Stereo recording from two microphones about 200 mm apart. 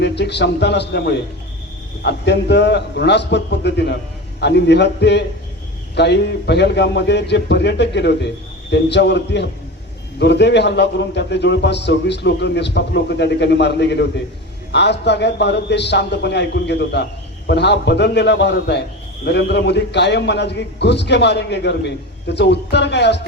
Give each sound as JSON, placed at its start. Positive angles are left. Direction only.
{"t": 0.0, "sound": "a man's voice", "side_deg": 55}